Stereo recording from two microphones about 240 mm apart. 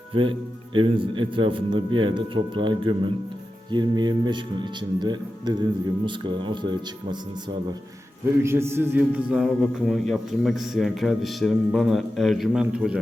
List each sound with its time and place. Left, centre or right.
0.1 s a man's voice: right
8.4 s a man's voice: centre